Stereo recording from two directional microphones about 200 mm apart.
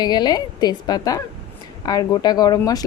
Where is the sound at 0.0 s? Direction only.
20° left (ahead or behind).